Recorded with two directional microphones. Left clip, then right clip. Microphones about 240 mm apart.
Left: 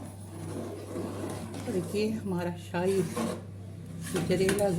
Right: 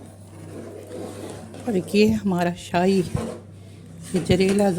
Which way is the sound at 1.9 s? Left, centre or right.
Right.